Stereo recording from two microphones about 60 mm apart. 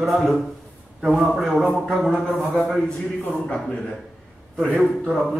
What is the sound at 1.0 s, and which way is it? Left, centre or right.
A man's voice, centre.